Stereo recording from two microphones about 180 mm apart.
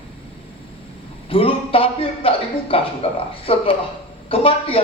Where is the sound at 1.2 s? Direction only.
30° left (ahead or behind).